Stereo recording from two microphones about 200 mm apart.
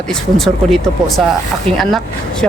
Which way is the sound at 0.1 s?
Centre (ahead or behind).